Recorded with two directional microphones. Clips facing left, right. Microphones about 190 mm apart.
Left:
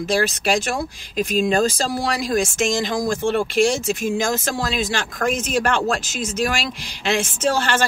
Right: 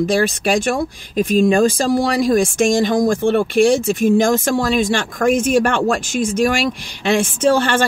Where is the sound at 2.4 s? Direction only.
55° right (ahead or behind).